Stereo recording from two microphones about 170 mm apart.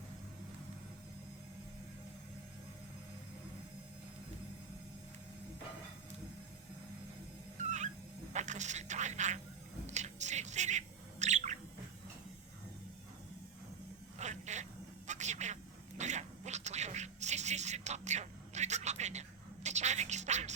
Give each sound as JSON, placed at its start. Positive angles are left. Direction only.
{"t": 7.6, "sound": "dog", "side_deg": -45}
{"t": 8.3, "sound": "speech", "side_deg": -45}
{"t": 9.8, "sound": "bird", "side_deg": -45}
{"t": 14.2, "sound": "a sound", "side_deg": -45}
{"t": 19.6, "sound": "music", "side_deg": -45}